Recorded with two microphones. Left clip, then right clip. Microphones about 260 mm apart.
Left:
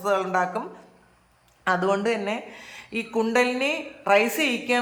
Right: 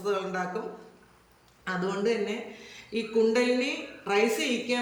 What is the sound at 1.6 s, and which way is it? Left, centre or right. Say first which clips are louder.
A woman's voice: left 6 dB; centre.